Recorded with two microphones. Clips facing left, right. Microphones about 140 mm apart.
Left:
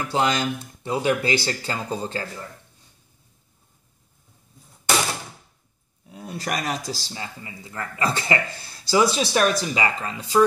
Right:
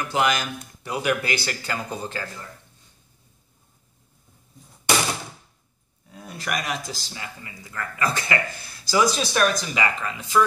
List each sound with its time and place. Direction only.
0.1 s speech: 30° left (ahead or behind)
6.2 s speech: 35° left (ahead or behind)